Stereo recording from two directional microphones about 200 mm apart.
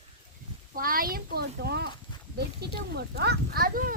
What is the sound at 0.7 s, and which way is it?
Speech, 45° right (ahead or behind).